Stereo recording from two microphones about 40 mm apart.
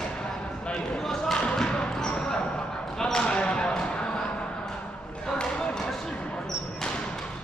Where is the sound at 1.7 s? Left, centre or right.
Left.